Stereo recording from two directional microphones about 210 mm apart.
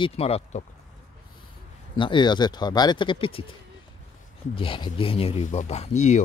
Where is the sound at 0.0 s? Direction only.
30° left (ahead or behind).